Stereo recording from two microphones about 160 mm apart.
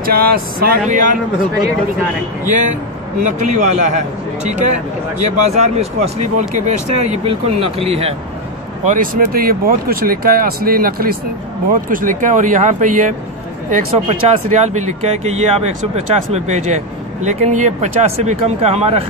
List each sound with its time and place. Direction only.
0.0 s speech: 70° right (ahead or behind)
0.8 s speech: 55° right (ahead or behind)
2.4 s speech: 50° right (ahead or behind)
8.8 s speech: 55° right (ahead or behind)
11.9 s speech: 55° right (ahead or behind); by 19.0 s 40° right (ahead or behind)